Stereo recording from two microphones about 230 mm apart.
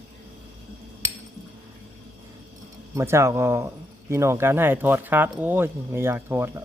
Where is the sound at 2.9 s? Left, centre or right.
Centre.